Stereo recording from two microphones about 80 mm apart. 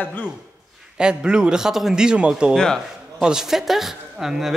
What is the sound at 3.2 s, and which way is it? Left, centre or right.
A man's voice, centre.